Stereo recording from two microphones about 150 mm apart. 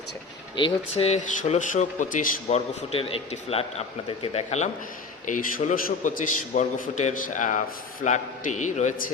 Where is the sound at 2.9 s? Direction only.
40° left (ahead or behind).